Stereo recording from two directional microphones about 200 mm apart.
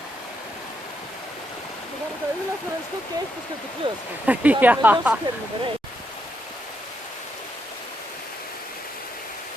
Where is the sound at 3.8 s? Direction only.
25° right (ahead or behind).